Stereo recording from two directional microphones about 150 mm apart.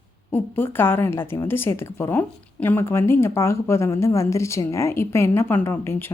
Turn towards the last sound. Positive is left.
turn(degrees=15)  # may be behind; listen again after turning